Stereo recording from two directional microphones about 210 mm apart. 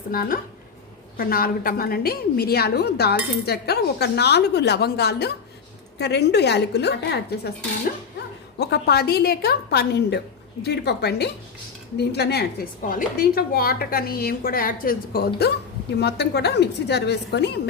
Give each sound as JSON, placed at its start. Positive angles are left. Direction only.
{"t": 0.1, "sound": "a woman's voice", "side_deg": 45}